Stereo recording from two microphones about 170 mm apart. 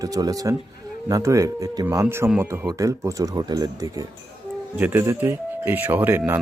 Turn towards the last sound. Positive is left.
turn(degrees=-10)  # may be behind; listen again after turning